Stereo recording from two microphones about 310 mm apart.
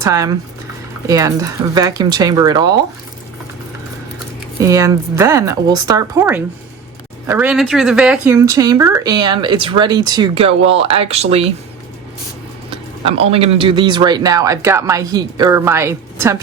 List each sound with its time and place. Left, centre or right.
0.0 s speech: centre
4.6 s speech: centre
12.7 s speech: centre